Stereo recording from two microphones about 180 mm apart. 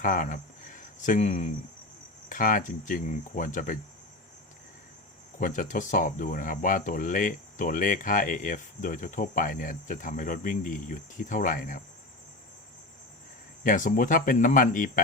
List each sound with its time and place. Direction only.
0.0 s speech: 50° left (ahead or behind)
5.4 s speech: 45° left (ahead or behind)
13.7 s speech: 45° left (ahead or behind)